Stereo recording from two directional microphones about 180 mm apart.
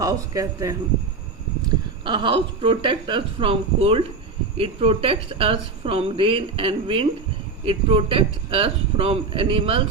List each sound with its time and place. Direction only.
0.0 s a man's voice: 20° right (ahead or behind)
2.0 s a woman's voice: 25° right (ahead or behind)